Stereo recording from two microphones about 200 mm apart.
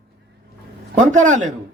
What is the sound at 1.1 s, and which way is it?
Speech, 40° right (ahead or behind).